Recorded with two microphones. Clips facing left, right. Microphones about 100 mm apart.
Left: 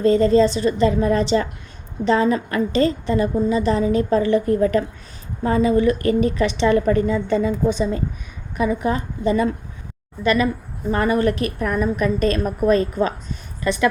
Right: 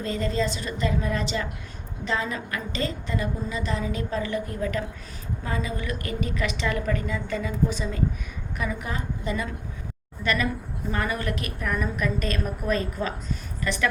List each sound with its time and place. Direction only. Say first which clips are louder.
0.0 s a woman's voice: left 12 dB; 35° left (ahead or behind)
10.2 s a woman's voice: left 8 dB; 20° left (ahead or behind)
10.9 s a woman's voice: left 10 dB; 35° left (ahead or behind)